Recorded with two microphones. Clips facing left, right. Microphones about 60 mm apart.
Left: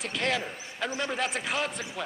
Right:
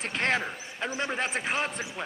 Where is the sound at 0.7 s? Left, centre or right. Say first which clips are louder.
Even; right.